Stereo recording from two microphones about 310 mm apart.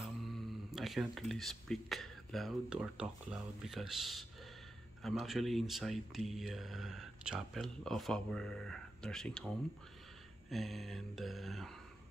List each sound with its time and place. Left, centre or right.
0.3 s speech: centre
10.5 s speech: centre